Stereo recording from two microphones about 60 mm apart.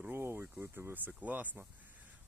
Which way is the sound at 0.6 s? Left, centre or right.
Right.